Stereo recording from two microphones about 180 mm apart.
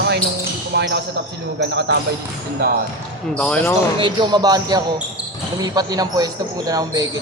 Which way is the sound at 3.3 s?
5° left (ahead or behind).